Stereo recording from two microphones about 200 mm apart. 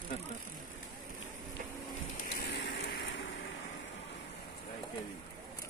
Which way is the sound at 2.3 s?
55° left (ahead or behind).